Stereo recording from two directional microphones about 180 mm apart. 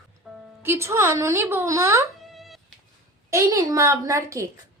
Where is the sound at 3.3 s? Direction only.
15° right (ahead or behind).